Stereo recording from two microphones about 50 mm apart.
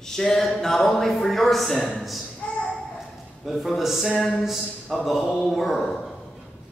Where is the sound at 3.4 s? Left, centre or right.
Centre.